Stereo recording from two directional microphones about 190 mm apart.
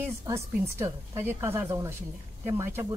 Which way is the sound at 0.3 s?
15° right (ahead or behind).